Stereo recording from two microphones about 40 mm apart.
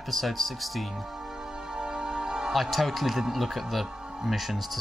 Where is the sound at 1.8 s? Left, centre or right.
Centre.